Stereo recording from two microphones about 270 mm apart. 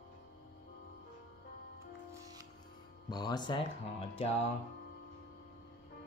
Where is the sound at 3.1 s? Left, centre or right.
Centre.